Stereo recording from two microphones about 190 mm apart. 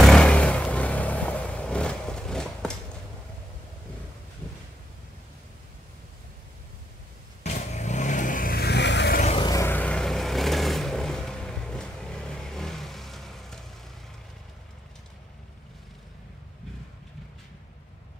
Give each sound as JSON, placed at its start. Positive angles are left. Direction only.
{"t": 0.0, "sound": "vehicle", "side_deg": 5}
{"t": 7.4, "sound": "vehicle", "side_deg": 35}
{"t": 9.2, "sound": "vehicle", "side_deg": 30}
{"t": 9.5, "sound": "vehicle", "side_deg": 15}